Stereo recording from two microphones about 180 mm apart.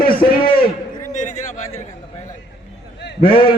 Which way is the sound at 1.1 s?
40° left (ahead or behind).